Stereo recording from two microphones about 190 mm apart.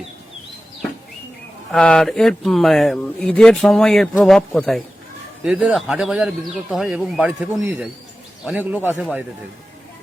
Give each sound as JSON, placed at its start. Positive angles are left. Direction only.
{"t": 1.7, "sound": "a man's voice", "side_deg": 5}